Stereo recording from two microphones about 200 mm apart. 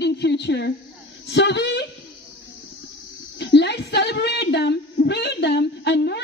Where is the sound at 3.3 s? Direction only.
60° left (ahead or behind).